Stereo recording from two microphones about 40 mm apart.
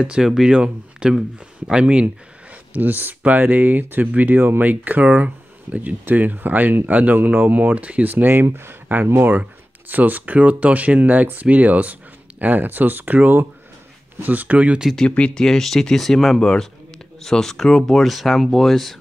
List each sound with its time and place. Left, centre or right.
0.0 s speech: right
2.7 s speech: right
6.0 s speech: right
8.0 s speech: right
8.8 s speech: right
14.2 s speech: right
15.0 s speech: left
15.3 s speech: centre